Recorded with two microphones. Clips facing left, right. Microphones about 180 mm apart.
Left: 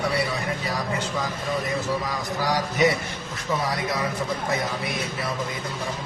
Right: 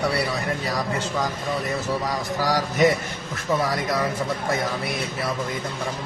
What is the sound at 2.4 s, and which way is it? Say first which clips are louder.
Speech: right 2 dB; 45° right (ahead or behind).